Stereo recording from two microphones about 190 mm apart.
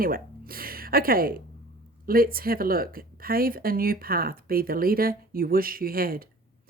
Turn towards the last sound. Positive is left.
turn(degrees=-50)  # may be behind; listen again after turning